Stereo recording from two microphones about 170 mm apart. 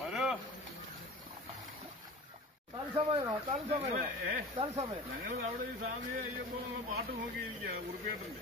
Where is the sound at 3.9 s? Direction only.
55° right (ahead or behind).